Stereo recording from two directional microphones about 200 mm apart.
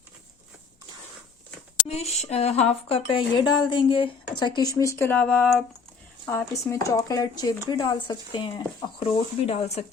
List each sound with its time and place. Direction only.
1.9 s speech: 30° left (ahead or behind)